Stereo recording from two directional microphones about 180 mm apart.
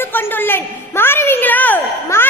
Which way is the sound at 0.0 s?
10° left (ahead or behind).